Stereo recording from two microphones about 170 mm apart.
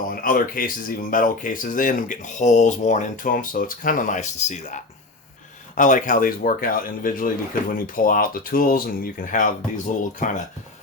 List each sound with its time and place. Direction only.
0.1 s speech: 55° left (ahead or behind)